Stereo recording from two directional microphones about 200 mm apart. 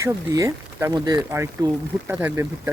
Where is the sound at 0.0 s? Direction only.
15° right (ahead or behind).